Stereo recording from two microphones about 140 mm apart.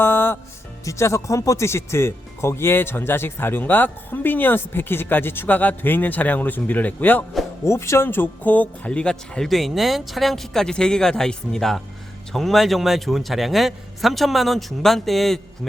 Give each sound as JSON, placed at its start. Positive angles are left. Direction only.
{"t": 0.0, "sound": "music", "side_deg": 15}
{"t": 0.9, "sound": "speech", "side_deg": 20}